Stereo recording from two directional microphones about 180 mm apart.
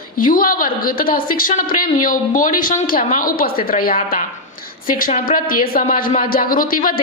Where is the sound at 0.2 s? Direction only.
50° left (ahead or behind).